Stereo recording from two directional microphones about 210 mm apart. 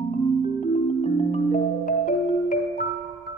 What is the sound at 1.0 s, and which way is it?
Music, 35° left (ahead or behind).